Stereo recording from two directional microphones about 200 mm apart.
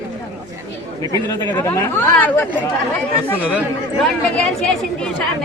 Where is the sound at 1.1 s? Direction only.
20° left (ahead or behind).